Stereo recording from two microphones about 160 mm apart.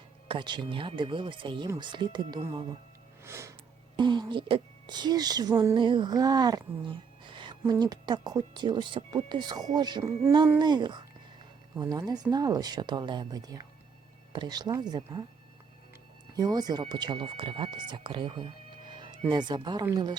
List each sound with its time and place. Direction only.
0.3 s speech: 30° right (ahead or behind)
3.2 s sniff: 15° right (ahead or behind)
3.9 s speech: 30° right (ahead or behind)
16.3 s speech: 25° right (ahead or behind)